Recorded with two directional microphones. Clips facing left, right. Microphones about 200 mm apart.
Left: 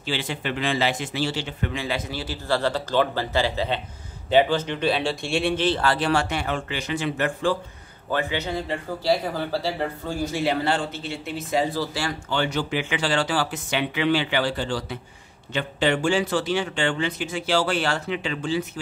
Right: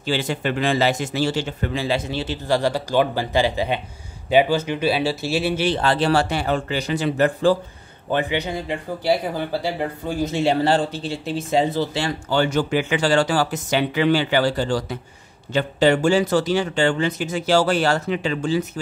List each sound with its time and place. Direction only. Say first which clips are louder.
0.0 s a man's voice: right 5 dB; 45° right (ahead or behind); by 5.8 s 10° right (ahead or behind)
5.8 s a man's voice: right 3 dB; 25° right (ahead or behind)
8.1 s speech: right 3 dB; 15° right (ahead or behind)
12.3 s a man's voice: right 6 dB; 45° right (ahead or behind)